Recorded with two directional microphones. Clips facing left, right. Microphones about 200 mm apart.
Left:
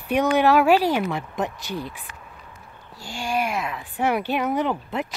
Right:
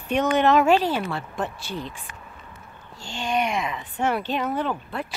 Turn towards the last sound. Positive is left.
turn(degrees=20)  # may be behind; listen again after turning